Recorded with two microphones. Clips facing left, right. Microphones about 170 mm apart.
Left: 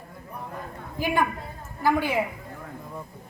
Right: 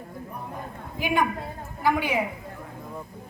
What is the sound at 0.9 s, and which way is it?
A woman's voice, 15° right (ahead or behind).